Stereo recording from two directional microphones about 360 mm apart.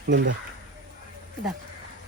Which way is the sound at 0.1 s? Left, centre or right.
Right.